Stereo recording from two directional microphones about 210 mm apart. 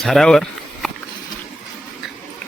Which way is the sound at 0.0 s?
Centre (ahead or behind).